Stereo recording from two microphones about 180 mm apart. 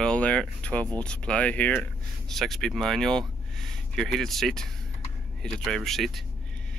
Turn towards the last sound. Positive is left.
turn(degrees=0)  # may be behind; listen again after turning